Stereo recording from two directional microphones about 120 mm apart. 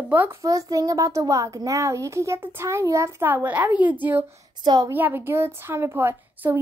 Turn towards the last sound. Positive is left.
turn(degrees=-15)  # may be behind; listen again after turning